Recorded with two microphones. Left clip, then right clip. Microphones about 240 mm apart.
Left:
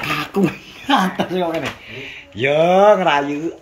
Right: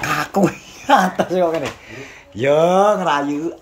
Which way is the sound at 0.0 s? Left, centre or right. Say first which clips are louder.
Right 2 dB; centre.